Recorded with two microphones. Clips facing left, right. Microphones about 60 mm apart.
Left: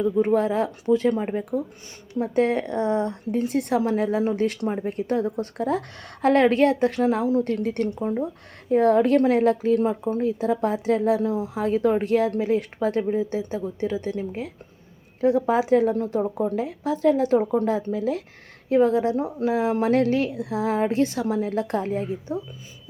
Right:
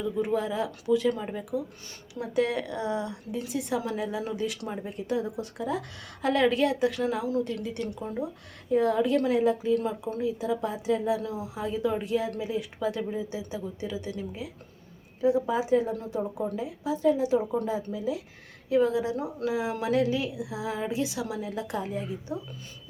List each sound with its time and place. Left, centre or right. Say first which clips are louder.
0.0 s a woman's voice: left 7 dB; left
4.6 s a woman's voice: left 8 dB; left
7.9 s a woman's voice: left 7 dB; left
9.7 s a woman's voice: left 6 dB; left
11.2 s a woman's voice: left 8 dB; left
15.2 s speech: left 5 dB; left
16.0 s a woman's voice: left 6 dB; left
18.7 s a woman's voice: left 5 dB; left